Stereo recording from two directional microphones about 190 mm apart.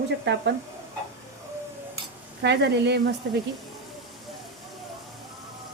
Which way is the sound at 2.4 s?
65° right (ahead or behind).